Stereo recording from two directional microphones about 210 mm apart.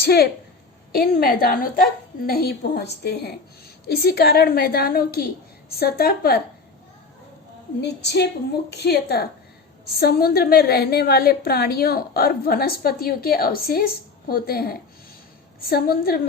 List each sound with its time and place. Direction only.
0.0 s a woman's voice: 50° left (ahead or behind)
7.8 s a woman's voice: 55° left (ahead or behind)